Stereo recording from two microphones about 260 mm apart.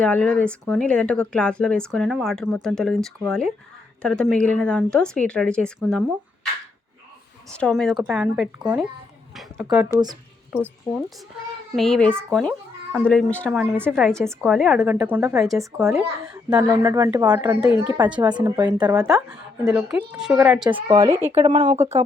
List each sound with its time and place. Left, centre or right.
0.0 s speech: centre
7.5 s speech: centre
9.3 s a sound: centre
9.9 s speech: centre
10.5 s speech: centre
19.0 s speech: centre
20.7 s speech: centre